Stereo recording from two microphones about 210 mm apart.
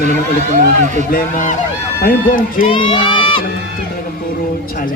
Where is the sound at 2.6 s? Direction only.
25° left (ahead or behind).